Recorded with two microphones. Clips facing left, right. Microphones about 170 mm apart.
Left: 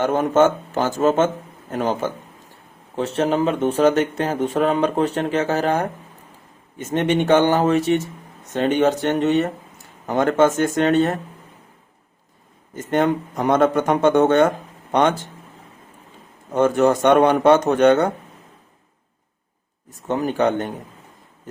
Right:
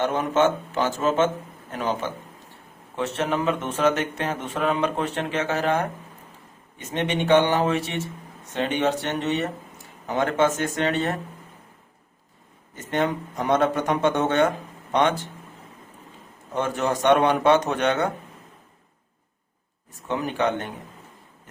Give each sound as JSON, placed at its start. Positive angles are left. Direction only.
{"t": 0.0, "sound": "speech", "side_deg": 45}
{"t": 6.9, "sound": "speech", "side_deg": 45}
{"t": 12.9, "sound": "speech", "side_deg": 50}
{"t": 16.6, "sound": "speech", "side_deg": 45}
{"t": 20.1, "sound": "speech", "side_deg": 40}